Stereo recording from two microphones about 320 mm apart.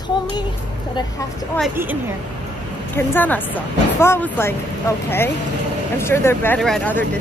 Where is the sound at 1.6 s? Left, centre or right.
Centre.